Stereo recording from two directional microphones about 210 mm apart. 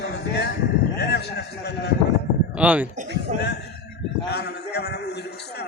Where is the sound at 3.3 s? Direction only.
35° right (ahead or behind).